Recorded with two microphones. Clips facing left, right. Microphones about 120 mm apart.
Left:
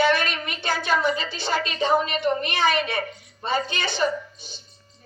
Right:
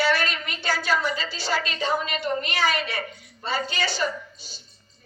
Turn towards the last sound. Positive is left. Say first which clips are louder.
# left 2 dB
turn(degrees=20)  # may be behind; listen again after turning